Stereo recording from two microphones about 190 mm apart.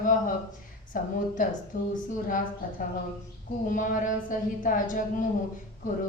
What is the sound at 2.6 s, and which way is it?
A woman's voice, 45° left (ahead or behind).